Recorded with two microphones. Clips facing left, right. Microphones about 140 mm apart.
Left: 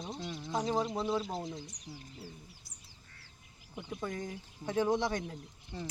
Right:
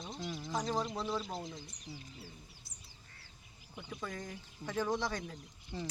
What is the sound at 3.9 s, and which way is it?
Speech, 25° left (ahead or behind).